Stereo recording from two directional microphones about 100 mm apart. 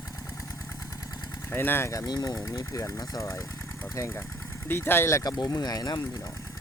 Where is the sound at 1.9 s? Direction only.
35° left (ahead or behind).